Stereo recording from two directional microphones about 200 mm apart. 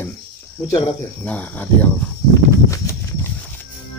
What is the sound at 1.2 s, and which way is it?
Speech, 10° left (ahead or behind).